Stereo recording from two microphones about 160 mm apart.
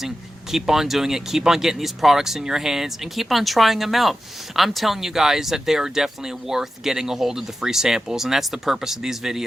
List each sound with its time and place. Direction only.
0.5 s speech: centre (ahead or behind)